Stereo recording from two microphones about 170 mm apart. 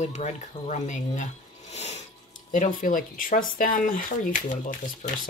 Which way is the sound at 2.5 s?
50° left (ahead or behind).